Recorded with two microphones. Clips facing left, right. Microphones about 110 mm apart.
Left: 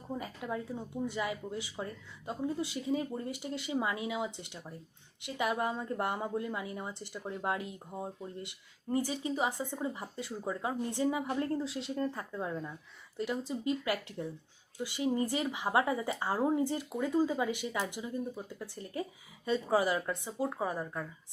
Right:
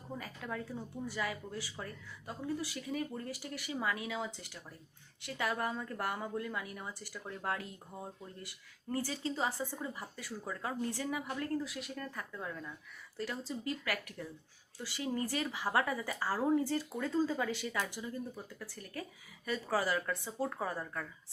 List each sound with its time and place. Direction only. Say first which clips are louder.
0.2 s a woman's voice: left 2 dB; 20° left (ahead or behind)